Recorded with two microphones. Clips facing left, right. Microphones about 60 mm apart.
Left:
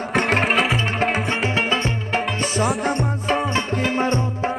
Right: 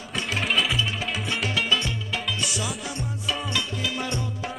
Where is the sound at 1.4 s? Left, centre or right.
Left.